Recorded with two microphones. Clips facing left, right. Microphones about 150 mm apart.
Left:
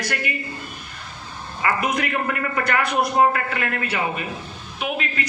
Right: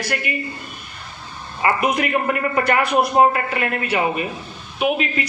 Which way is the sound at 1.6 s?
20° right (ahead or behind).